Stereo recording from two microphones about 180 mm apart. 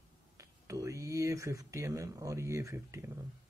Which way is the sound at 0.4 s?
15° right (ahead or behind).